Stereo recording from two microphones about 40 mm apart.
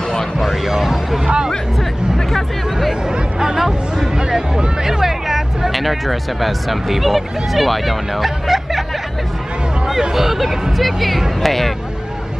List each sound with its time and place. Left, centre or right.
0.4 s a sound: centre
1.2 s music: right
3.1 s music: centre
4.8 s speech: centre
10.1 s speech: centre